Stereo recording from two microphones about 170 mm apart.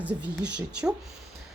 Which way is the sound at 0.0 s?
10° right (ahead or behind).